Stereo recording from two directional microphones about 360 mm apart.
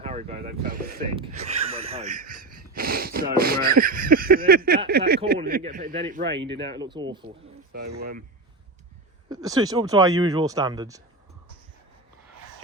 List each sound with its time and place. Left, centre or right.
0.0 s speech: centre
6.7 s speech: centre
7.7 s speech: right
9.3 s speech: centre